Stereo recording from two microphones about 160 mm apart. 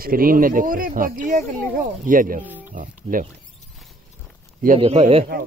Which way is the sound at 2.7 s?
55° right (ahead or behind).